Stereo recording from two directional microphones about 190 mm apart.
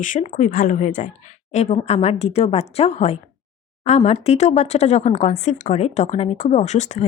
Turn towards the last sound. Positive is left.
turn(degrees=35)  # may be behind; listen again after turning